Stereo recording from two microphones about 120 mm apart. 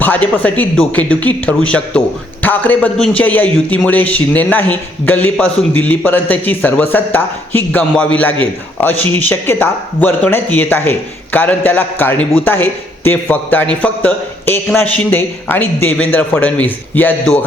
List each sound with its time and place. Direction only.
0.0 s speech: 15° left (ahead or behind)